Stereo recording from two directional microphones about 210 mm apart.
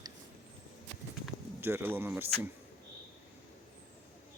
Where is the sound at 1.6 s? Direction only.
10° right (ahead or behind).